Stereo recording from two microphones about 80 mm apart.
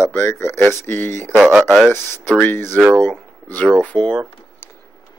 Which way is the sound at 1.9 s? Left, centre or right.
Left.